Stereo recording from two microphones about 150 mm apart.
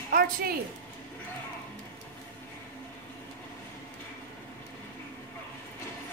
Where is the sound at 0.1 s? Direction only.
90° right.